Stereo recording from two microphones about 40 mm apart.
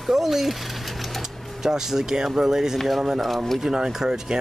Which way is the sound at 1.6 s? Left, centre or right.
Centre.